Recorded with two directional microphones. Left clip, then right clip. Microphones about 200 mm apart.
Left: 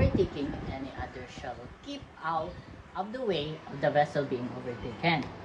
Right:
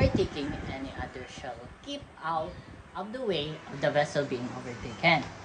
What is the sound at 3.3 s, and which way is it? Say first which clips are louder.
Speech: even; 15° right (ahead or behind).